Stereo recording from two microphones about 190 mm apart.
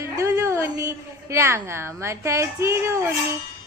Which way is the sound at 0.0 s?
15° right (ahead or behind).